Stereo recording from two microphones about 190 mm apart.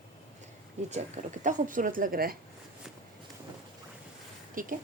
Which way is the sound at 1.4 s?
45° right (ahead or behind).